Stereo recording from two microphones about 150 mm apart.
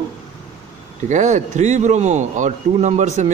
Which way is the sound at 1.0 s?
50° right (ahead or behind).